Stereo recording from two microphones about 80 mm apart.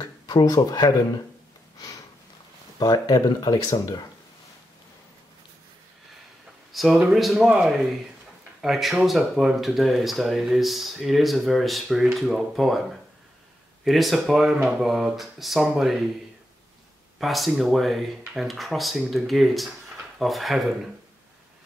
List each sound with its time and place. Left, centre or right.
0.0 s speech: left
2.8 s speech: left
6.7 s speech: centre
13.8 s speech: centre
17.2 s speech: centre